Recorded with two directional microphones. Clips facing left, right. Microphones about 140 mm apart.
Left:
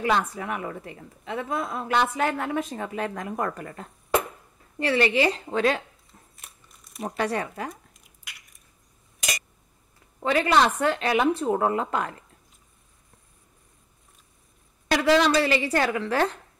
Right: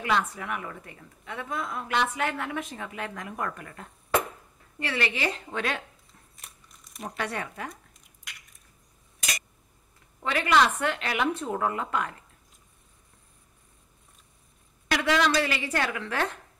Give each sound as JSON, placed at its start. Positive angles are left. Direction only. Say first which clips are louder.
{"t": 0.0, "sound": "a woman's voice", "louder": "left 3 dB", "side_deg": 35}
{"t": 6.3, "sound": "crumpling", "louder": "left 1 dB", "side_deg": 0}
{"t": 7.1, "sound": "a woman's voice", "louder": "left 6 dB", "side_deg": 35}
{"t": 7.7, "sound": "squish", "louder": "left 2 dB", "side_deg": 5}
{"t": 10.2, "sound": "a woman's voice", "louder": "left 3 dB", "side_deg": 30}
{"t": 14.9, "sound": "a woman's voice", "louder": "left 5 dB", "side_deg": 35}